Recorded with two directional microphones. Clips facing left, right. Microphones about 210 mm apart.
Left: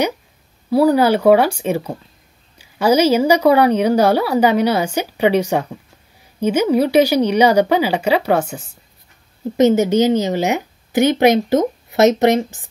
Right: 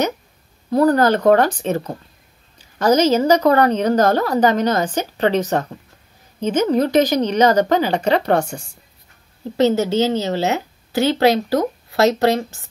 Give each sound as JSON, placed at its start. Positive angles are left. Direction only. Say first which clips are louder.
{"t": 0.7, "sound": "a woman's voice", "louder": "left 2 dB", "side_deg": 10}
{"t": 9.6, "sound": "a woman's voice", "louder": "left 3 dB", "side_deg": 20}